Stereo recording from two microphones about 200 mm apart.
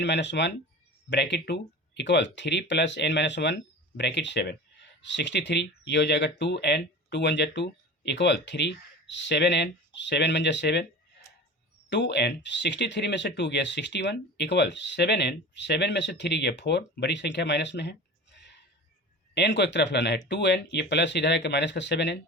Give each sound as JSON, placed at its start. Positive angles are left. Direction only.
{"t": 0.0, "sound": "speech", "side_deg": 60}
{"t": 11.9, "sound": "speech", "side_deg": 60}